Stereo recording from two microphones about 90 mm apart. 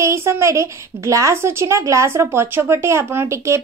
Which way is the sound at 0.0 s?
30° right (ahead or behind).